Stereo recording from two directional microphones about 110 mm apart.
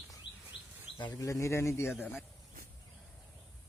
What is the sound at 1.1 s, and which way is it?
Speech, 30° left (ahead or behind).